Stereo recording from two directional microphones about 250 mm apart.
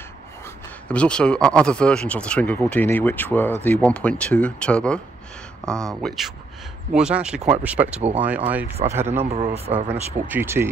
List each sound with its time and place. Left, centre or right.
0.8 s speech: centre
9.3 s speech: right
10.2 s speech: centre